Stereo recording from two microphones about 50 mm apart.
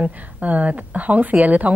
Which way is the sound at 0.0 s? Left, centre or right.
Right.